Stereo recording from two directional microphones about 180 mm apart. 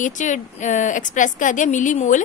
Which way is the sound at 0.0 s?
45° left (ahead or behind).